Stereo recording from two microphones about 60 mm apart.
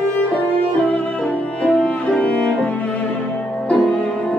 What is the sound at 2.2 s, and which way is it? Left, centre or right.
Music, centre.